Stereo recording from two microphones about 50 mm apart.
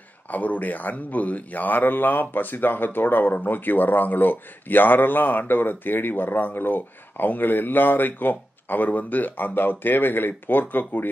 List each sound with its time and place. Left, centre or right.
0.3 s speech: left